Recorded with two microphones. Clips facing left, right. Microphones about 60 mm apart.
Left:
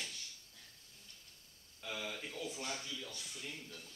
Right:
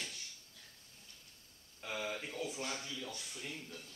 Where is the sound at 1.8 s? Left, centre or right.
Right.